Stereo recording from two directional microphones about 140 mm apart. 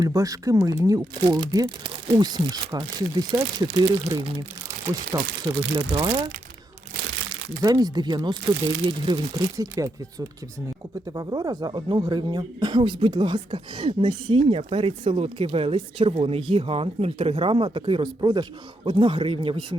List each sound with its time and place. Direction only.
0.0 s speech: 25° right (ahead or behind)
5.9 s speech: 35° right (ahead or behind)
7.6 s speech: 30° right (ahead or behind)